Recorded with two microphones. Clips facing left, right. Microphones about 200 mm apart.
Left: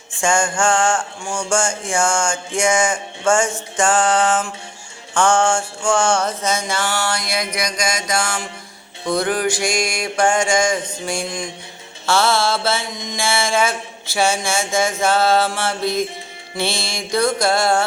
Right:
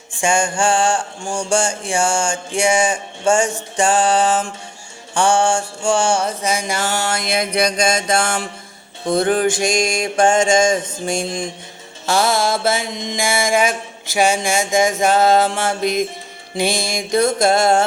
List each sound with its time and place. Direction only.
0.2 s mantra: 15° right (ahead or behind)
6.0 s music: 30° right (ahead or behind)
6.2 s mantra: 10° right (ahead or behind); by 8.2 s 30° right (ahead or behind)
8.2 s a sound: 55° right (ahead or behind)
9.0 s mantra: 25° right (ahead or behind)